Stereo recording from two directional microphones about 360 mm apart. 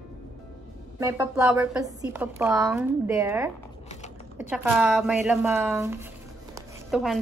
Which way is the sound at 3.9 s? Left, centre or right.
Centre.